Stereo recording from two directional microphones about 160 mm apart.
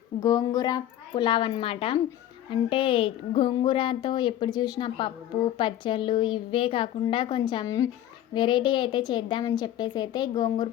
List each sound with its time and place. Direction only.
0.2 s a woman's voice: 25° left (ahead or behind)